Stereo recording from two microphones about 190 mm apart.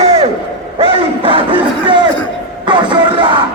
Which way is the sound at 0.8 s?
30° right (ahead or behind).